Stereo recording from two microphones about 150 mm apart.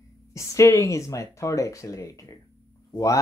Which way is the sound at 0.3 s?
20° left (ahead or behind).